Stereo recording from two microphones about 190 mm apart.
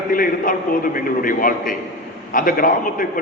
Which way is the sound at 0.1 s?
45° left (ahead or behind).